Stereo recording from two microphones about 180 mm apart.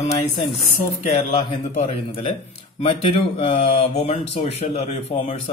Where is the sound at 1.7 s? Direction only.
35° left (ahead or behind).